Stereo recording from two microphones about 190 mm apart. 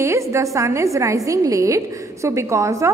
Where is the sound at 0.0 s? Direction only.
15° right (ahead or behind).